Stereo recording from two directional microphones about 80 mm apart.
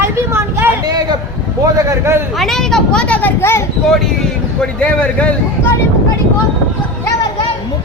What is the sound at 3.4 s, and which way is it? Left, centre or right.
Speech, left.